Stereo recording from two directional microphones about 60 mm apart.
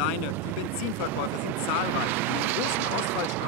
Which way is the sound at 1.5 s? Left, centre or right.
Right.